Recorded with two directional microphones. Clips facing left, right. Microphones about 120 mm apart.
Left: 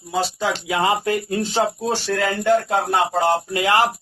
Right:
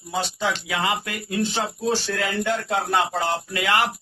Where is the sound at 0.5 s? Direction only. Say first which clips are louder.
Left 5 dB; 30° left (ahead or behind).